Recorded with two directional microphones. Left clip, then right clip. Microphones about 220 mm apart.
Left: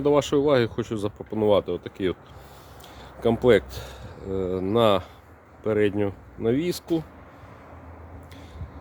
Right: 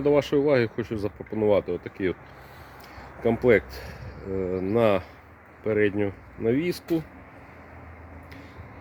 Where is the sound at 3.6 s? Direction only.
40° left (ahead or behind).